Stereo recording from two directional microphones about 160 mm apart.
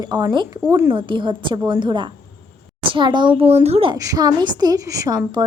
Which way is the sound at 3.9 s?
20° right (ahead or behind).